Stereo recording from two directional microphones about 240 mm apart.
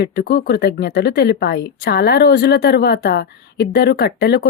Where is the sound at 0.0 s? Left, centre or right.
Left.